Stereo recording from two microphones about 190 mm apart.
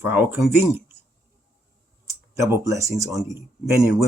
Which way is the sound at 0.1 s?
10° right (ahead or behind).